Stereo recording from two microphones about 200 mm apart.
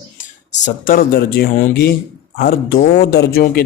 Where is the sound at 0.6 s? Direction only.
45° left (ahead or behind).